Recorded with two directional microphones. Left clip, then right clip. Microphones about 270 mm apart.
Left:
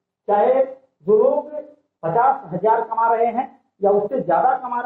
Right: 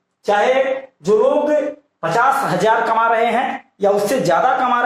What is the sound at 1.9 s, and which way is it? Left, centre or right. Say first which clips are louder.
Speech: right 2 dB; right.